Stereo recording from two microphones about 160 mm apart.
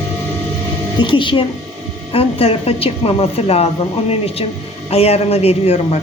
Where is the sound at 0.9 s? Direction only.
30° left (ahead or behind).